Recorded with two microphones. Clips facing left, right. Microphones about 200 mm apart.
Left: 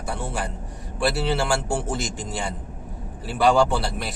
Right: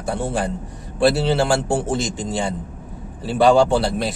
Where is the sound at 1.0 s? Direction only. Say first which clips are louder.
Right 6 dB; 25° right (ahead or behind).